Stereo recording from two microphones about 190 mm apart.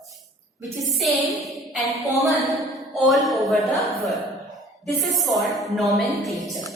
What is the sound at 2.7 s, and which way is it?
A woman's voice, centre (ahead or behind).